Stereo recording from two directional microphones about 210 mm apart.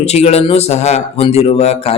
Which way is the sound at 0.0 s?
30° left (ahead or behind).